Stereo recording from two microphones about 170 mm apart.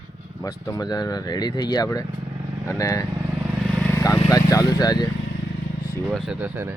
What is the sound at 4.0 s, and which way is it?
Lawn mower, 20° left (ahead or behind).